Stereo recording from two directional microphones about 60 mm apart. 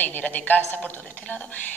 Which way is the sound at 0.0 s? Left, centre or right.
Left.